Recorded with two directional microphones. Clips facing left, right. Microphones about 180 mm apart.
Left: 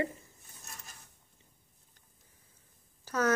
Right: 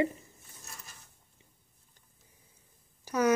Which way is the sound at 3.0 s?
15° right (ahead or behind).